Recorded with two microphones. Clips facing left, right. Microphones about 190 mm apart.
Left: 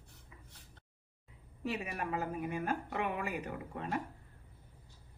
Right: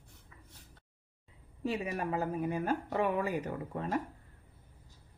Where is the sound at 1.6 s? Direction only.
30° right (ahead or behind).